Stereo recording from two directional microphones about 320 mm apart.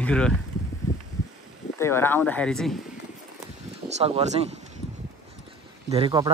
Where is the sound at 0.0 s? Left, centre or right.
Centre.